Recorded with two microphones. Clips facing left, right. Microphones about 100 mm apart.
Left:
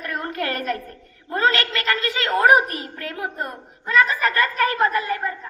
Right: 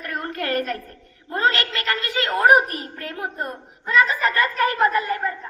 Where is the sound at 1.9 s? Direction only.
35° right (ahead or behind).